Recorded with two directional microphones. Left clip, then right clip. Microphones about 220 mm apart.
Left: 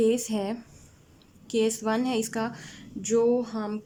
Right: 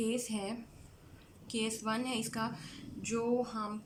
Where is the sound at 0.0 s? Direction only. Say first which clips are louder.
Left 12 dB; 35° left (ahead or behind).